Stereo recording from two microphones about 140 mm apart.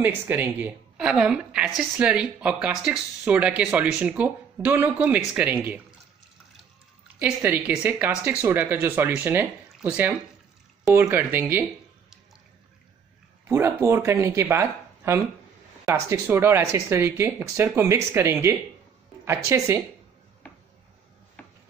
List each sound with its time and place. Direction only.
0.0 s speech: 15° right (ahead or behind)
7.2 s speech: 10° right (ahead or behind)
13.5 s speech: 20° right (ahead or behind)
21.4 s a sound: 10° left (ahead or behind)